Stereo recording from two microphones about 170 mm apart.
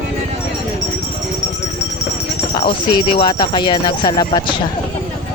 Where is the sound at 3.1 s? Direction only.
25° left (ahead or behind).